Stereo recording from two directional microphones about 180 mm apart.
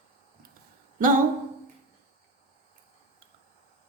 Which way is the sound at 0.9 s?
50° right (ahead or behind).